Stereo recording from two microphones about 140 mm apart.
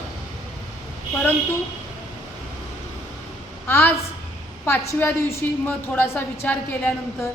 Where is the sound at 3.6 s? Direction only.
15° left (ahead or behind).